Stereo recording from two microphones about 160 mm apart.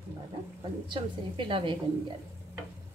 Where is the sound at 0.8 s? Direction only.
30° right (ahead or behind).